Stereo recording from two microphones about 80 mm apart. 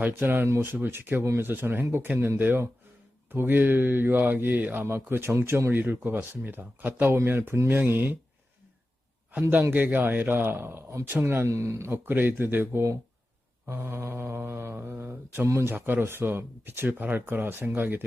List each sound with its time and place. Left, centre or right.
0.1 s speech: right
9.5 s speech: right
11.4 s speech: right
13.8 s speech: right